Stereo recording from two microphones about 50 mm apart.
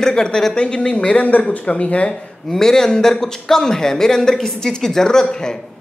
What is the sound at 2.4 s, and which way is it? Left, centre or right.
Speech, centre.